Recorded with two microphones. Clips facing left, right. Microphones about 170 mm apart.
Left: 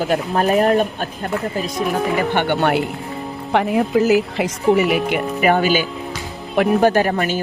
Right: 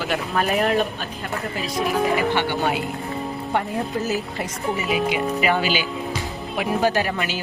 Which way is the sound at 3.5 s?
80° left.